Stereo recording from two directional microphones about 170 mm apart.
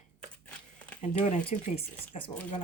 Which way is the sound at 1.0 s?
40° left (ahead or behind).